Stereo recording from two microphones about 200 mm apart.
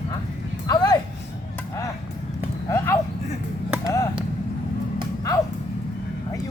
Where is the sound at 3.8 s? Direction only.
15° left (ahead or behind).